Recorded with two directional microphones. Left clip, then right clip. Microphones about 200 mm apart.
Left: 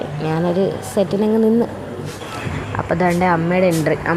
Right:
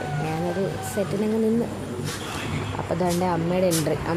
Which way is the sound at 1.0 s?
25° left (ahead or behind).